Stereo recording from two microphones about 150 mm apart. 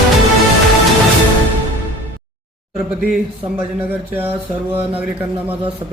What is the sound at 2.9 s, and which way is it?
Speech, 5° right (ahead or behind).